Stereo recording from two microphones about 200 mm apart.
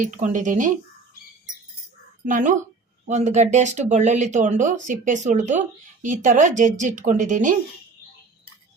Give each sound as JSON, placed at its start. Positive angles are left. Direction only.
{"t": 0.0, "sound": "speech", "side_deg": -40}
{"t": 2.2, "sound": "speech", "side_deg": -40}